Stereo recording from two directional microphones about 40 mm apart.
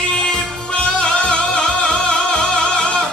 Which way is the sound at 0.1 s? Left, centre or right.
Left.